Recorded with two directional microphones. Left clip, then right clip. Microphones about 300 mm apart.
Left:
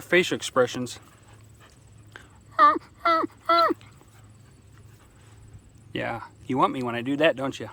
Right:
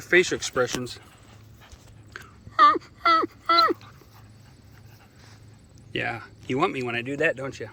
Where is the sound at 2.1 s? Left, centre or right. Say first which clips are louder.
Right 1 dB; centre.